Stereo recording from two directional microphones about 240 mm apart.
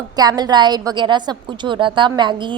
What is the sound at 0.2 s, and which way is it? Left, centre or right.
A woman's voice, centre.